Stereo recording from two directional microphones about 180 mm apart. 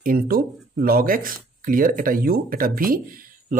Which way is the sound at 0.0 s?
55° right (ahead or behind).